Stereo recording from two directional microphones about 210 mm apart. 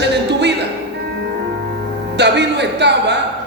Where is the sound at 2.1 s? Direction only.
55° right (ahead or behind).